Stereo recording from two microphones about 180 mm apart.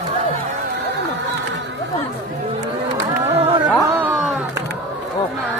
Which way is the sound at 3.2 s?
35° right (ahead or behind).